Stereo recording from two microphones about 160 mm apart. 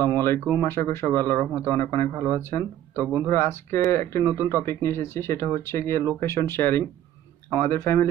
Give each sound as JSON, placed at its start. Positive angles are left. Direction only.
{"t": 0.6, "sound": "speech", "side_deg": 15}
{"t": 4.2, "sound": "speech", "side_deg": -15}
{"t": 4.5, "sound": "speech", "side_deg": 15}